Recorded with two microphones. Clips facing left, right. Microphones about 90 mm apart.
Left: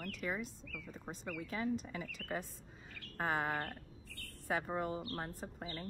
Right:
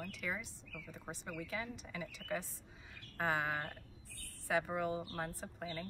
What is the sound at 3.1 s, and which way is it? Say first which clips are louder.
Bird: even; 40° left (ahead or behind).